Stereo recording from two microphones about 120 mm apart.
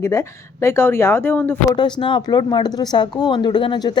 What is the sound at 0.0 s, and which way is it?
Speech, 25° left (ahead or behind).